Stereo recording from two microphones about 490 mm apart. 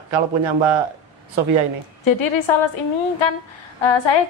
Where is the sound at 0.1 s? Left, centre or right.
Right.